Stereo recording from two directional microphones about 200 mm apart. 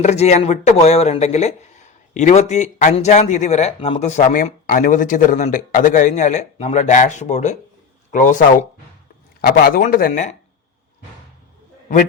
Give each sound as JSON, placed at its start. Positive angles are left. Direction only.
{"t": 0.0, "sound": "speech", "side_deg": 35}
{"t": 9.4, "sound": "speech", "side_deg": 50}